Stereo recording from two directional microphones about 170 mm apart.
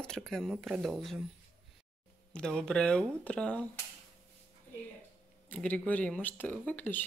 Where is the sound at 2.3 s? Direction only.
5° left (ahead or behind).